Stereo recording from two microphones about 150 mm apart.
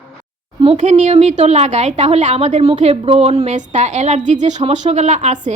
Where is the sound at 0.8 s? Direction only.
55° right (ahead or behind).